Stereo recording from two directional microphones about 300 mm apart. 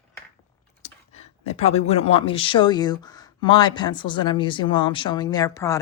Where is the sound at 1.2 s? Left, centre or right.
Left.